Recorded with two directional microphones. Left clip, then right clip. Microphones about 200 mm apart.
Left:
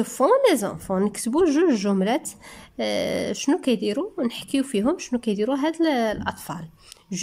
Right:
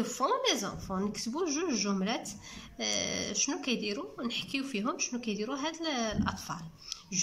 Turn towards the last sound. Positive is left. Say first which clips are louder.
# left 2 dB
turn(degrees=40)  # may be behind; listen again after turning